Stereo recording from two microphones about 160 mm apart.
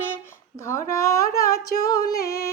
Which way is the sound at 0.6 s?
20° left (ahead or behind).